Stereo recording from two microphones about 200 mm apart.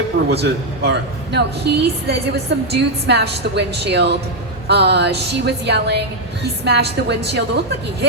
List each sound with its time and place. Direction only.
0.3 s a woman's voice: 55° right (ahead or behind)